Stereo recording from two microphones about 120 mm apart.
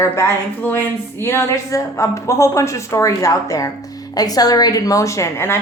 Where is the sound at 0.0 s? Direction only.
25° left (ahead or behind).